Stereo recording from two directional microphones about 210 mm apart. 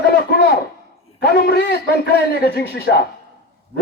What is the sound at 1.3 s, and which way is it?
A man's voice, 50° left (ahead or behind).